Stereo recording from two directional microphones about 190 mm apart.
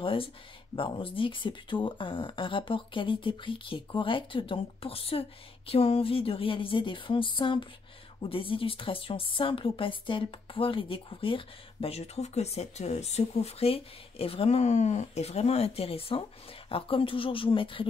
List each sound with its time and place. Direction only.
0.0 s a woman's voice: 30° left (ahead or behind)